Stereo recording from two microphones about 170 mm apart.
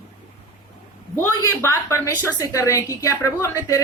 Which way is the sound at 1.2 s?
20° left (ahead or behind).